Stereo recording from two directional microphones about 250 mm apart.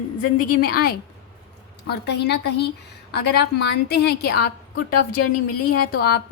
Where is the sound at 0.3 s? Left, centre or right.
Left.